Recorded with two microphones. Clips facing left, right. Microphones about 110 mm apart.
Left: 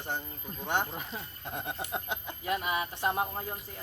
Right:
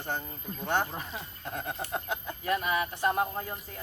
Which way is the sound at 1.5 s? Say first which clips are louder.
Right 2 dB; 15° left (ahead or behind).